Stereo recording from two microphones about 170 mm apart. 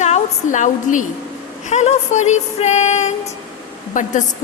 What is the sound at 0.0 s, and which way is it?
A woman's voice, 45° left (ahead or behind).